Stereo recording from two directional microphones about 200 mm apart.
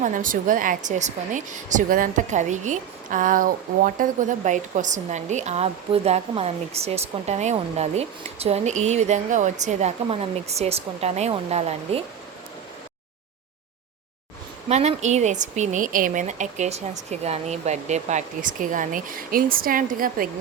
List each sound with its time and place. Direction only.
0.0 s speech: 40° right (ahead or behind)
14.7 s speech: 35° right (ahead or behind)